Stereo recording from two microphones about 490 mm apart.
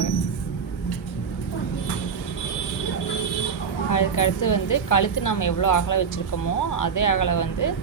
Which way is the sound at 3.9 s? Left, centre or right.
Left.